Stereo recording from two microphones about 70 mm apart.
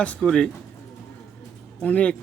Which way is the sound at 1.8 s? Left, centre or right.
Centre.